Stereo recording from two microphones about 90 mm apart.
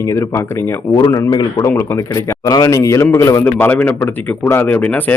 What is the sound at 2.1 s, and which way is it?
Speech, 40° left (ahead or behind).